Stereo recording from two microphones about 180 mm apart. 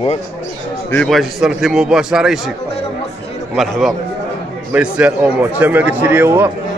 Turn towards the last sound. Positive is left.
turn(degrees=-10)  # may be behind; listen again after turning